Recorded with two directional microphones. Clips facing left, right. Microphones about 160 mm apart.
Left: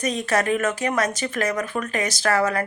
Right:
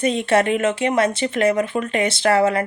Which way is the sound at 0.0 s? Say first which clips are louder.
Right 5 dB; 25° right (ahead or behind).